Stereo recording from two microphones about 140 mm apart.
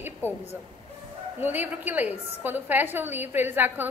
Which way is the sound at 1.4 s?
15° right (ahead or behind).